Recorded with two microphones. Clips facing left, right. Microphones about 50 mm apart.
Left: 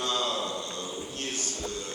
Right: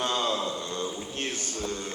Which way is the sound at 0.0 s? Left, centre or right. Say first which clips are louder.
Right 2 dB; right.